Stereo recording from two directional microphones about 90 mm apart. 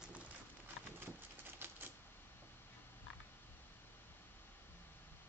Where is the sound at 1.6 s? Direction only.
25° right (ahead or behind).